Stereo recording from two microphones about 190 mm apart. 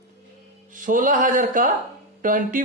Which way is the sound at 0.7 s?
45° right (ahead or behind).